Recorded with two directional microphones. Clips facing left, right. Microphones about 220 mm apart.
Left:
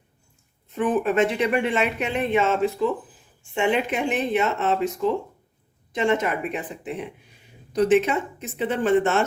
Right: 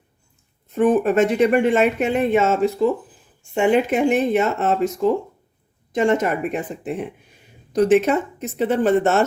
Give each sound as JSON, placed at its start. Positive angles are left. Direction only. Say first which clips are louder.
{"t": 0.8, "sound": "speech", "louder": "right 5 dB", "side_deg": -45}
{"t": 5.9, "sound": "speech", "louder": "right 4 dB", "side_deg": -45}